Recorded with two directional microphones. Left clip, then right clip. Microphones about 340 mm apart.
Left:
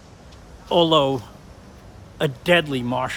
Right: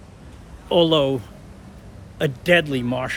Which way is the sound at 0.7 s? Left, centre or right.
Centre.